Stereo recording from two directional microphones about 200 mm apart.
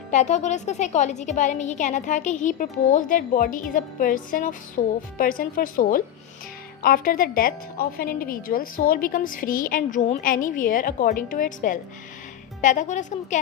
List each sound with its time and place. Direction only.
0.1 s a woman's voice: 35° left (ahead or behind)